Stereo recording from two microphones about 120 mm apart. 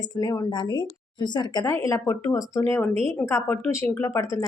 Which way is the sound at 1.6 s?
25° left (ahead or behind).